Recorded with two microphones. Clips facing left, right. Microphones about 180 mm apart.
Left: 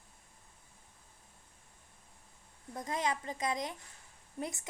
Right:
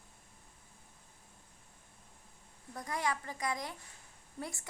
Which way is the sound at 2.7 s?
20° left (ahead or behind).